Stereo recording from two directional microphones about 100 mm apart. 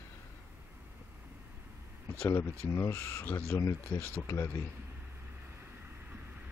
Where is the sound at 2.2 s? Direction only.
30° left (ahead or behind).